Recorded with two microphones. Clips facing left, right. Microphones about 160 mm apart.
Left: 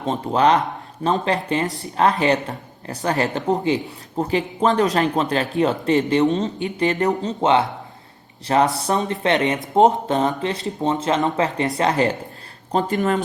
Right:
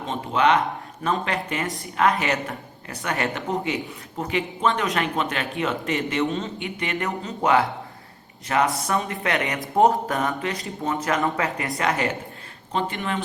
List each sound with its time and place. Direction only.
0.0 s speech: 35° left (ahead or behind)
12.7 s speech: 40° left (ahead or behind)